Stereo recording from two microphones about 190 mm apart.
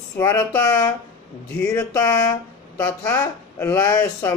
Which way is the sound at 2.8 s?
10° left (ahead or behind).